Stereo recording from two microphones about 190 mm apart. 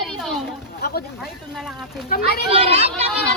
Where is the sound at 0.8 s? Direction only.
55° left (ahead or behind).